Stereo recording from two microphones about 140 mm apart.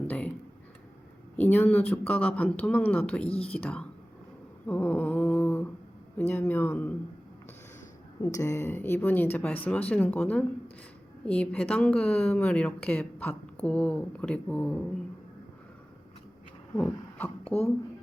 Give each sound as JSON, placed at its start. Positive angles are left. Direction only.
{"t": 0.1, "sound": "a sound", "side_deg": 10}
{"t": 1.4, "sound": "a woman's voice", "side_deg": 10}
{"t": 3.2, "sound": "speech", "side_deg": 45}
{"t": 3.5, "sound": "a woman's voice", "side_deg": 10}
{"t": 4.6, "sound": "humming", "side_deg": 10}
{"t": 6.1, "sound": "a woman's voice", "side_deg": 10}
{"t": 8.2, "sound": "a woman's voice", "side_deg": 20}
{"t": 16.7, "sound": "speech", "side_deg": 10}